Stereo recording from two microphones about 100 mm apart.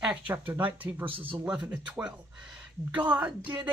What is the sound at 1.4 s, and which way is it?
Speech, 10° right (ahead or behind).